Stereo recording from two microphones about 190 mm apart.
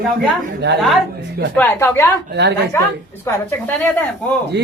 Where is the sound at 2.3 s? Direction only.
60° right (ahead or behind).